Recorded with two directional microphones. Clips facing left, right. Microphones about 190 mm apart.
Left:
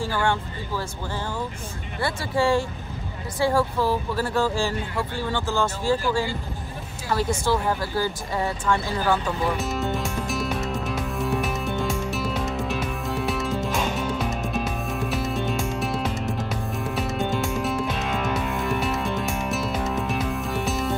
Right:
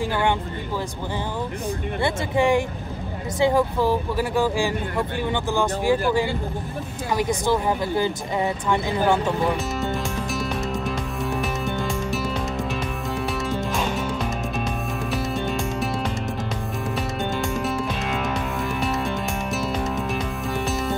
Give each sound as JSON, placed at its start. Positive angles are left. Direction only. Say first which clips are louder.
{"t": 0.0, "sound": "speech", "louder": "right 2 dB", "side_deg": -20}
{"t": 2.0, "sound": "speech", "louder": "right 2 dB", "side_deg": -20}
{"t": 7.1, "sound": "speech", "louder": "right 1 dB", "side_deg": -15}
{"t": 9.6, "sound": "music", "louder": "even", "side_deg": 0}